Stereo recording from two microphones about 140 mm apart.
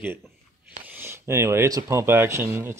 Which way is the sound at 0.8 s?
15° right (ahead or behind).